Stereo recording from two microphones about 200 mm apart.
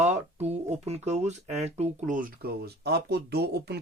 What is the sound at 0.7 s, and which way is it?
Speech, 35° right (ahead or behind).